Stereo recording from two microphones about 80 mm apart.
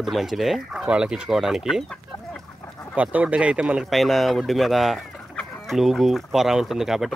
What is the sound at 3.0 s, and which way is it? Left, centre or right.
Speech, centre.